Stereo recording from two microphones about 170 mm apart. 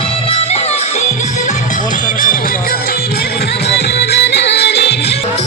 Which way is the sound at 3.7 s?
80° left.